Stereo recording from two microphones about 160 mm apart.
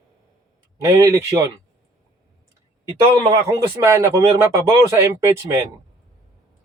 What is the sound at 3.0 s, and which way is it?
Speech, 25° right (ahead or behind).